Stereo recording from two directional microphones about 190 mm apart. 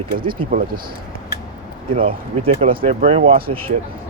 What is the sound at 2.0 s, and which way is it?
Speech, 30° right (ahead or behind).